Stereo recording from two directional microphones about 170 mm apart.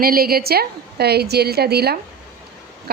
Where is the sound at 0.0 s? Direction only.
60° right (ahead or behind).